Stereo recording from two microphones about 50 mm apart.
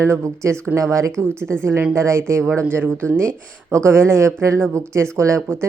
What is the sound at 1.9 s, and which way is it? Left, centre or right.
Speech, right.